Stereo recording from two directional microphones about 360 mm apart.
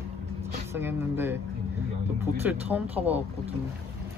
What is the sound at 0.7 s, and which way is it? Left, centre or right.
Speech, centre.